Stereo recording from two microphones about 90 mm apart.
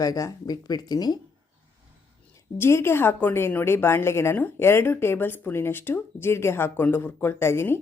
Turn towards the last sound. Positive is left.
turn(degrees=30)  # may be behind; listen again after turning